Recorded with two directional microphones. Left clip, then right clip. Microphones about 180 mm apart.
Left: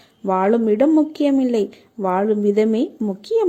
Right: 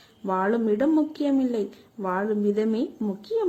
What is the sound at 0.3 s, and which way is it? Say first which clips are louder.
Speech: left 7 dB; 25° left (ahead or behind).